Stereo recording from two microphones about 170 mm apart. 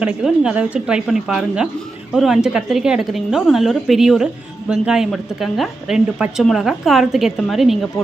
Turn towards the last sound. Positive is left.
turn(degrees=0)  # may be behind; listen again after turning